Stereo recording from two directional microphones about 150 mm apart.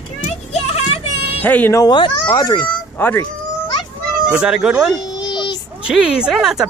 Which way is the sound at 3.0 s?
15° left (ahead or behind).